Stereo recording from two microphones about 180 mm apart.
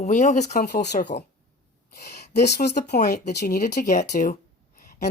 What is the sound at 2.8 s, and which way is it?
A woman's voice, 65° left (ahead or behind).